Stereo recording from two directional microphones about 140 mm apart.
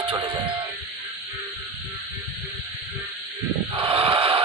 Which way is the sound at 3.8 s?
40° right (ahead or behind).